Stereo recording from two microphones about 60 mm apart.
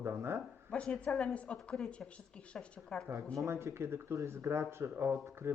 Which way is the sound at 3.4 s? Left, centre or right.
Right.